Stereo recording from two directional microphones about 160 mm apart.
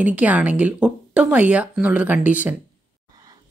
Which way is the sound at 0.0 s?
10° right (ahead or behind).